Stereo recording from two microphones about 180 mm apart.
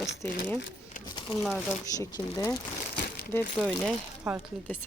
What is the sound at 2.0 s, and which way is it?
Speech, 20° left (ahead or behind).